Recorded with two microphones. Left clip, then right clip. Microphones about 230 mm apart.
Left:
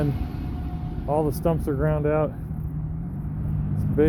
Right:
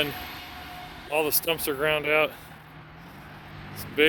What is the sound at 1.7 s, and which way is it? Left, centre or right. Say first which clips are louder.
Speech: right 3 dB; right.